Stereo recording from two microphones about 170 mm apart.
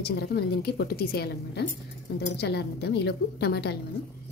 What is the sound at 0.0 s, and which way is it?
A woman's voice, 70° left (ahead or behind).